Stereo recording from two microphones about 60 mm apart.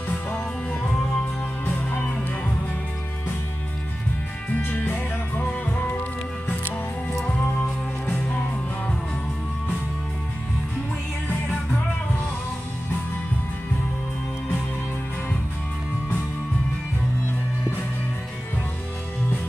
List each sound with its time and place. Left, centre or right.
0.3 s music: left
5.4 s music: left
7.3 s music: left